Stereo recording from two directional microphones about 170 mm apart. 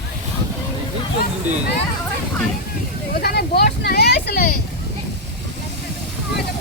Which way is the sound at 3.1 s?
65° left (ahead or behind).